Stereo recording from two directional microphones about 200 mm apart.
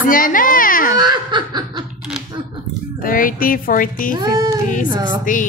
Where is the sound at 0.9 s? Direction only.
20° right (ahead or behind).